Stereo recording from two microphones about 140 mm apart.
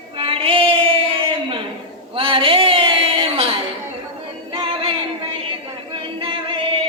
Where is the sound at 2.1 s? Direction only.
40° right (ahead or behind).